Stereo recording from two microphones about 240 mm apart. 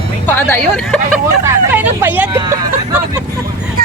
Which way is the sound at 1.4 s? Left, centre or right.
Centre.